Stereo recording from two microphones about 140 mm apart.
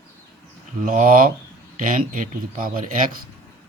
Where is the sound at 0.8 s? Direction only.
75° right (ahead or behind).